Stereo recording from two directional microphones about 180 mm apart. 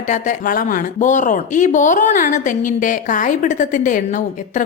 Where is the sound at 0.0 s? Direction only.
45° left (ahead or behind).